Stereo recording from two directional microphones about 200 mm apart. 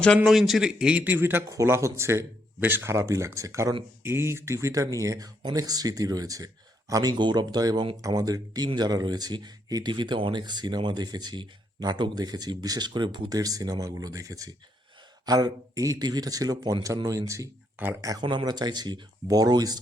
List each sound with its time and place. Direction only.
0.2 s a man's voice: centre (ahead or behind); by 19.8 s 20° right (ahead or behind)